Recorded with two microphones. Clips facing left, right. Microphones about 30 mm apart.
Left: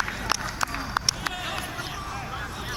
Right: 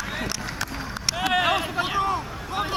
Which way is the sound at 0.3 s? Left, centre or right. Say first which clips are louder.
Left 2 dB; centre.